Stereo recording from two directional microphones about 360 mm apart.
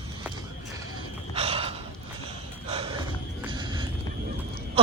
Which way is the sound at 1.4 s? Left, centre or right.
Centre.